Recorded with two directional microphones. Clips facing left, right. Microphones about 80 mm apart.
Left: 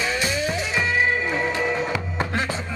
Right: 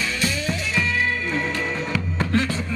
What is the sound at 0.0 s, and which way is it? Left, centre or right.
Music, left.